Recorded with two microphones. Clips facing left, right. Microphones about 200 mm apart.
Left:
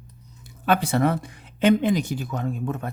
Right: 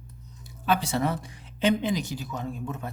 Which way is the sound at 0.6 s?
55° left (ahead or behind).